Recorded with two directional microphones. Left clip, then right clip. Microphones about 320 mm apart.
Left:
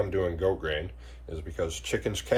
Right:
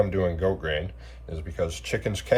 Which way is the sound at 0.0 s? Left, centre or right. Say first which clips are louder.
Right 3 dB; centre.